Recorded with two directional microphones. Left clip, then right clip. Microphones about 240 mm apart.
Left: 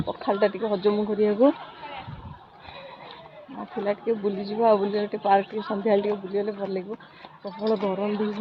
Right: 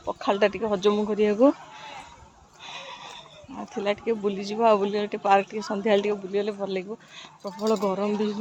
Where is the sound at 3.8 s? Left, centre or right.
Centre.